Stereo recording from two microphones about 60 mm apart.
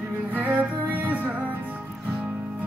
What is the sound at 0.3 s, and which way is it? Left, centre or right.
Music, right.